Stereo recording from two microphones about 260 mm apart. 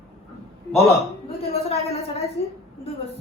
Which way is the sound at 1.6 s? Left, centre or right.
Left.